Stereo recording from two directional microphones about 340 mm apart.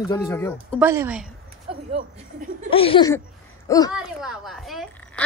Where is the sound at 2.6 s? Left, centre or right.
Centre.